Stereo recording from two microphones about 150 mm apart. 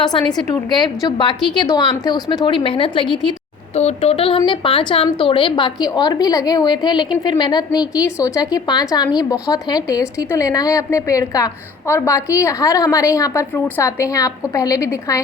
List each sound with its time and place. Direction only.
0.3 s a woman's voice: 25° left (ahead or behind)